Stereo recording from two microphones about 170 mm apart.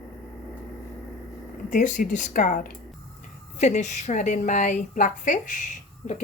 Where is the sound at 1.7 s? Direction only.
50° left (ahead or behind).